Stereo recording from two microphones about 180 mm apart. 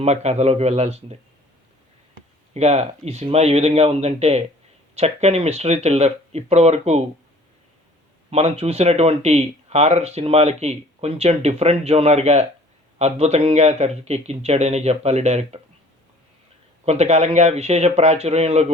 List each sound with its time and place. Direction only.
0.0 s speech: 35° right (ahead or behind)
2.5 s speech: 35° right (ahead or behind)
8.3 s speech: 35° right (ahead or behind)
16.8 s speech: 35° right (ahead or behind)